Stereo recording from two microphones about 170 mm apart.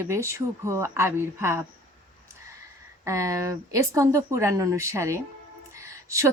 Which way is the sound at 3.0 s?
20° right (ahead or behind).